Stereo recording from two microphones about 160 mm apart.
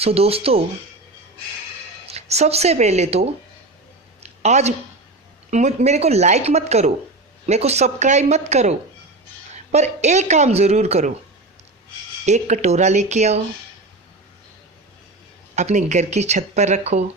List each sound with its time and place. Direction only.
0.0 s speech: 40° right (ahead or behind)
2.0 s speech: 40° right (ahead or behind)
4.2 s a sound: 45° right (ahead or behind)
5.5 s a woman's voice: 45° right (ahead or behind)
9.7 s a woman's voice: 45° right (ahead or behind)
12.2 s a woman's voice: 45° right (ahead or behind)
15.5 s a woman's voice: 45° right (ahead or behind)